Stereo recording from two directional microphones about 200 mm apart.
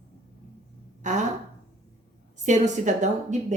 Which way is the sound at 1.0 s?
35° right (ahead or behind).